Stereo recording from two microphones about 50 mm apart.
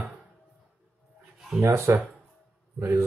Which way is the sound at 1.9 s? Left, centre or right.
Right.